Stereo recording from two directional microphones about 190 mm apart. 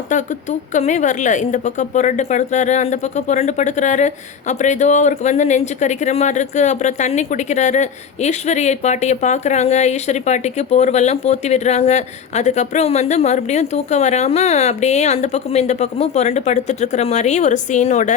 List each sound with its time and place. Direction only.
0.1 s speech: 40° left (ahead or behind)